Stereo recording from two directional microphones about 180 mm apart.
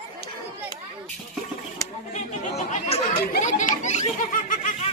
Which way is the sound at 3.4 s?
45° left (ahead or behind).